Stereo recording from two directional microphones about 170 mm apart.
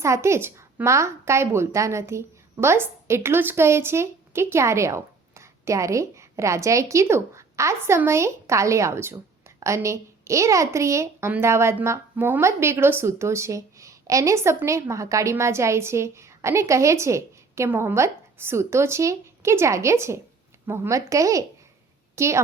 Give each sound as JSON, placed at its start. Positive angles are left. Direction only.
{"t": 0.0, "sound": "a woman's voice", "side_deg": -15}